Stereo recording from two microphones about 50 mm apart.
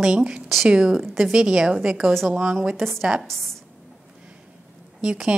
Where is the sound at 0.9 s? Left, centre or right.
Centre.